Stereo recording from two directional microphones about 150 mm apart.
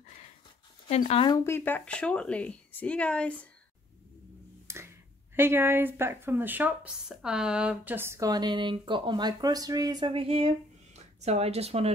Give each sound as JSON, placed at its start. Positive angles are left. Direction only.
{"t": 0.8, "sound": "speech", "side_deg": 45}
{"t": 1.4, "sound": "speech", "side_deg": 15}
{"t": 4.7, "sound": "a sound", "side_deg": -20}
{"t": 5.3, "sound": "a woman's voice", "side_deg": -15}